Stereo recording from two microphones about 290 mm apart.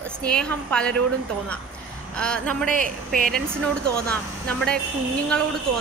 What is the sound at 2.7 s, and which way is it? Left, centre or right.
Speech, right.